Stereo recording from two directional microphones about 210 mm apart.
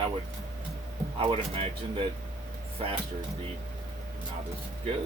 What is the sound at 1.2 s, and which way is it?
Speech, 25° right (ahead or behind).